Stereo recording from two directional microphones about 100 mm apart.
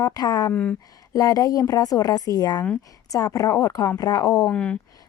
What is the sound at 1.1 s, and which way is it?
Speech, 35° left (ahead or behind).